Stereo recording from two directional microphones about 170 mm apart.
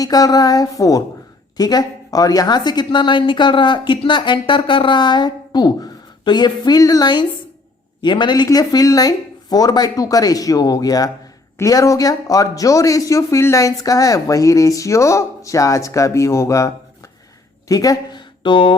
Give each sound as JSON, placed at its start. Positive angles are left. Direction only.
{"t": 0.0, "sound": "a woman's voice", "side_deg": 20}